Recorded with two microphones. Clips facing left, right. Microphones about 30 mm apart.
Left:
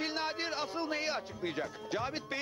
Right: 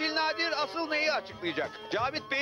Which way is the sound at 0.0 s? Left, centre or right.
Right.